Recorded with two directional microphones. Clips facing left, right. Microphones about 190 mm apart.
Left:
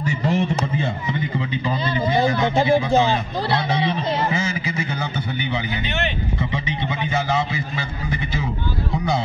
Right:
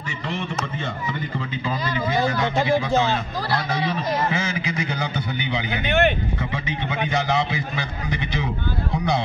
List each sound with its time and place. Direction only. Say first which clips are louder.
0.0 s a sound: left 8 dB; 40° left (ahead or behind)
2.2 s speech: left 3 dB; 10° left (ahead or behind)
5.9 s speech: right 6 dB; 55° right (ahead or behind)